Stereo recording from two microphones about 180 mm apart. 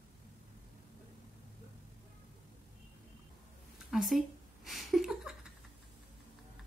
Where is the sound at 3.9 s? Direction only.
Centre (ahead or behind).